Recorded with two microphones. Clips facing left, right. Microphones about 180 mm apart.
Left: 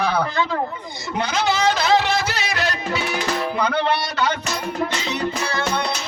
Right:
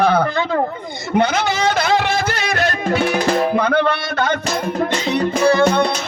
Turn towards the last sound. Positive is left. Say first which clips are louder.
# right 10 dB
turn(degrees=-55)  # may be behind; listen again after turning